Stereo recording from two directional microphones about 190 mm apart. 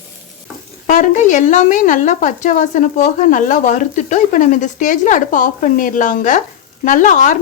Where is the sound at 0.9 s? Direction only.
40° left (ahead or behind).